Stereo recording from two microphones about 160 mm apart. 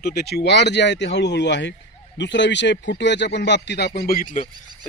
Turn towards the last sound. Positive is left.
turn(degrees=60)  # may be behind; listen again after turning